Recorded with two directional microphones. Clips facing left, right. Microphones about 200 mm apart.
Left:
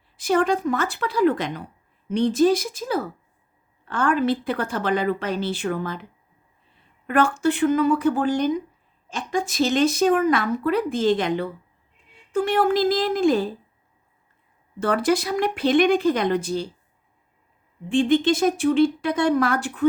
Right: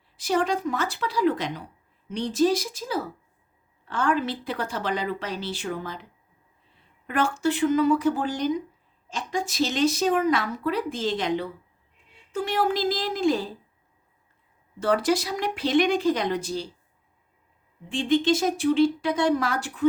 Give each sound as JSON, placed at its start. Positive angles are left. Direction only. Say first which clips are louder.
{"t": 0.2, "sound": "a woman's voice", "louder": "left 4 dB", "side_deg": 55}
{"t": 7.1, "sound": "a woman's voice", "louder": "left 4 dB", "side_deg": 55}
{"t": 14.8, "sound": "a woman's voice", "louder": "left 2 dB", "side_deg": 55}
{"t": 17.9, "sound": "a woman's voice", "louder": "left 3 dB", "side_deg": 55}